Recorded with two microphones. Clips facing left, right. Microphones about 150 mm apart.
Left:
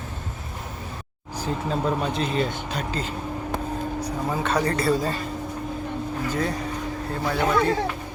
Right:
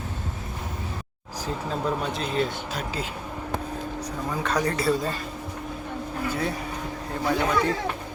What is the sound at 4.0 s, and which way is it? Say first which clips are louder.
Speech: left 2 dB; 5° left (ahead or behind).